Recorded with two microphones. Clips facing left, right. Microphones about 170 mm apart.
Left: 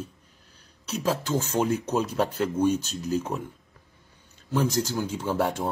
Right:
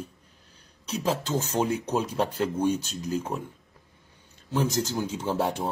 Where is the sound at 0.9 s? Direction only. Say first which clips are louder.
Left 1 dB; 15° right (ahead or behind).